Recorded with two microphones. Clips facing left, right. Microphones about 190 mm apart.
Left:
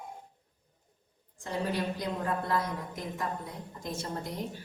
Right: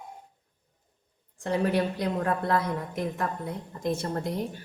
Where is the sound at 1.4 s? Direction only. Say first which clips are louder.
Right 6 dB; 65° right (ahead or behind).